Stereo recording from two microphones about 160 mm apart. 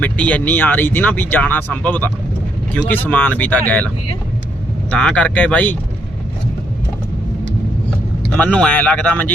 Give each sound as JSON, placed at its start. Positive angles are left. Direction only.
{"t": 0.0, "sound": "speech", "side_deg": 10}
{"t": 8.4, "sound": "speech", "side_deg": 10}